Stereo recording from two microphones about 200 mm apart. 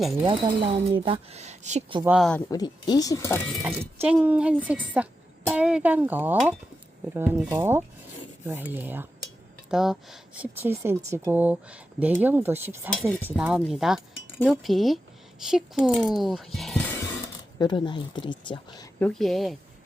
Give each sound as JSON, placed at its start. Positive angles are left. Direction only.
{"t": 0.0, "sound": "speech", "side_deg": 0}
{"t": 0.3, "sound": "speech", "side_deg": -25}
{"t": 2.0, "sound": "speech", "side_deg": 0}
{"t": 2.5, "sound": "speech", "side_deg": 20}
{"t": 4.0, "sound": "speech", "side_deg": -5}
{"t": 12.9, "sound": "speech", "side_deg": 0}
{"t": 14.3, "sound": "chink", "side_deg": 10}
{"t": 14.6, "sound": "speech", "side_deg": 0}
{"t": 17.6, "sound": "speech", "side_deg": 25}
{"t": 18.9, "sound": "speech", "side_deg": 5}